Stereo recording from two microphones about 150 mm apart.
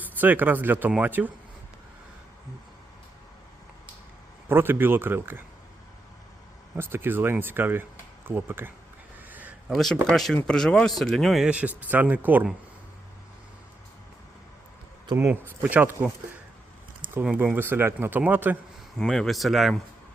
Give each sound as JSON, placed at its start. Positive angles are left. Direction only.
{"t": 0.0, "sound": "speech", "side_deg": -10}
{"t": 4.4, "sound": "speech", "side_deg": -15}
{"t": 6.7, "sound": "speech", "side_deg": -15}
{"t": 9.3, "sound": "a sound", "side_deg": -10}
{"t": 9.7, "sound": "speech", "side_deg": 0}
{"t": 15.0, "sound": "speech", "side_deg": -20}
{"t": 15.3, "sound": "speech", "side_deg": -10}
{"t": 17.2, "sound": "speech", "side_deg": -15}
{"t": 18.9, "sound": "speech", "side_deg": 5}